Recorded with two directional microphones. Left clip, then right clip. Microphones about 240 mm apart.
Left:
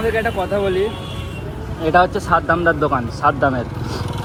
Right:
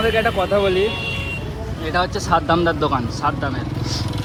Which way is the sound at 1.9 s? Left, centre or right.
Centre.